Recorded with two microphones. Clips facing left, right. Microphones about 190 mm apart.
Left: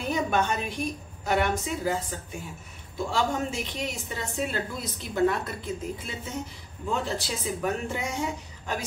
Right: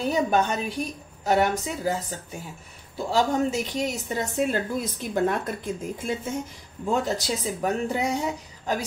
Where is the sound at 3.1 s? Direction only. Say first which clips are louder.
Right 6 dB; 40° right (ahead or behind).